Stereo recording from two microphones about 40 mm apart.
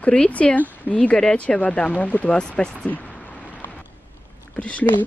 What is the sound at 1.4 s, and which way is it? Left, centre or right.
Speech, left.